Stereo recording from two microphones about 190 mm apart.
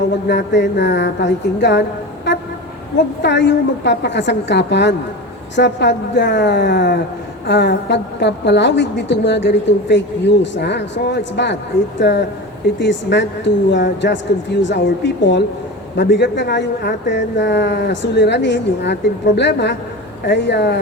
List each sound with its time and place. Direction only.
0.3 s a woman's voice: 65° left (ahead or behind)
2.3 s vehicle: 70° left (ahead or behind)
3.2 s a woman's voice: 65° left (ahead or behind)